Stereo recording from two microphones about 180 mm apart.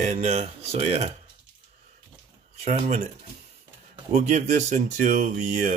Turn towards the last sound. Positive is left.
turn(degrees=-45)  # may be behind; listen again after turning